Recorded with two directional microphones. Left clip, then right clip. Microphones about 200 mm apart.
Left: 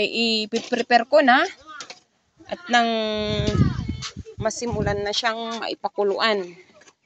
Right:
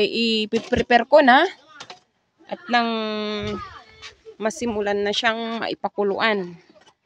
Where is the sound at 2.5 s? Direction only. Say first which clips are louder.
Left 1 dB; 20° right (ahead or behind).